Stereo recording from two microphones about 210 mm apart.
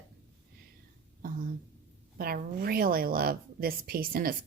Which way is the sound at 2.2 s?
45° right (ahead or behind).